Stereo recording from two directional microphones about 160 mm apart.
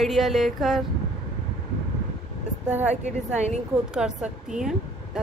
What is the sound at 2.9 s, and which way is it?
Speech, 45° right (ahead or behind).